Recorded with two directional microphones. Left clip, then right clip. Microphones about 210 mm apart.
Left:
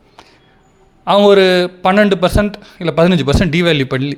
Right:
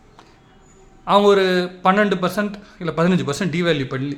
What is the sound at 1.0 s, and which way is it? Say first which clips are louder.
A man's voice: left 6 dB; 35° left (ahead or behind).